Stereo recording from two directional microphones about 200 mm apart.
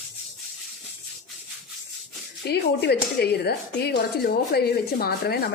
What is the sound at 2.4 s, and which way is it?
Speech, 55° left (ahead or behind).